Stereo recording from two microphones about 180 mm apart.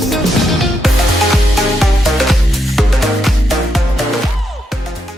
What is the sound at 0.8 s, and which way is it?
Music, centre (ahead or behind).